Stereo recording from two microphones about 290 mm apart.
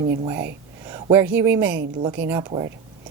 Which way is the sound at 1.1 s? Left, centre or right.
Centre.